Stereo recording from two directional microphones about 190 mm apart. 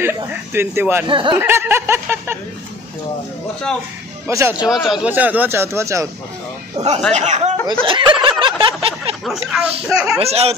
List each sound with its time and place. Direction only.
0.0 s speech: 10° right (ahead or behind)
1.0 s speech: 25° right (ahead or behind)
1.4 s speech: 10° right (ahead or behind)
4.3 s speech: 15° right (ahead or behind)
4.6 s speech: 5° right (ahead or behind)
6.8 s speech: 35° right (ahead or behind)
7.8 s a sound: 25° right (ahead or behind)
9.2 s speech: 5° right (ahead or behind)
10.1 s speech: 30° right (ahead or behind)